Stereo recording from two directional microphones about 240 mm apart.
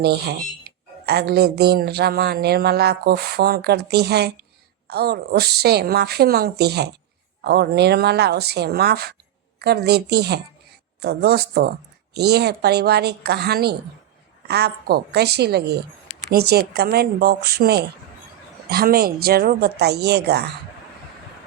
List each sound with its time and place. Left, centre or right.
0.0 s a woman's voice: right